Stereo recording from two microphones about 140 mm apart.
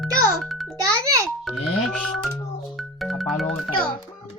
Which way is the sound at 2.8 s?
Centre (ahead or behind).